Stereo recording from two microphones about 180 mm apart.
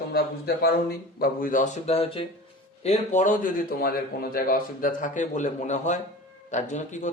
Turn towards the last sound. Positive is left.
turn(degrees=40)  # may be behind; listen again after turning